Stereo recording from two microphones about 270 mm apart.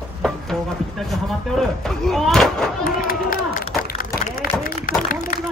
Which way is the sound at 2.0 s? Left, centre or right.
Centre.